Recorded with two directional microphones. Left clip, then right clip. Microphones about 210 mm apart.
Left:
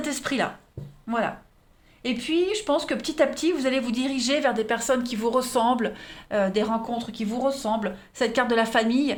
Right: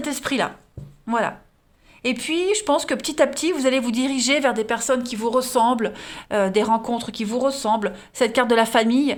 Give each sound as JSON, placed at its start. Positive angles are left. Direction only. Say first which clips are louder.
{"t": 0.0, "sound": "speech", "louder": "right 3 dB", "side_deg": -30}